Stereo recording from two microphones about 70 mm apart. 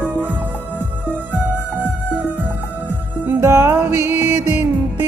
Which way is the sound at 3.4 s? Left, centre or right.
Right.